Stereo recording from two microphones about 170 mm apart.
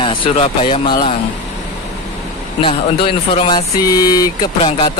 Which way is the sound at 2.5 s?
30° left (ahead or behind).